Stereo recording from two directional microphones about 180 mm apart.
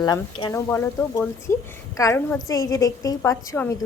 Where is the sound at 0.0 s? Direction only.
25° left (ahead or behind).